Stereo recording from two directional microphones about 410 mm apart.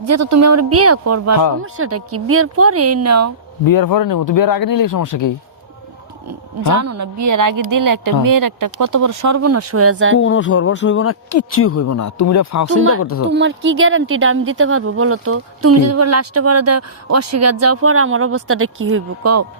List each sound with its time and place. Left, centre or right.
0.1 s speech: right
3.7 s speech: left
6.7 s speech: right
10.2 s speech: left
13.3 s speech: right